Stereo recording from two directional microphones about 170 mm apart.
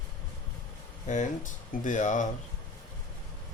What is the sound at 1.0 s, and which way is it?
Speech, 45° left (ahead or behind).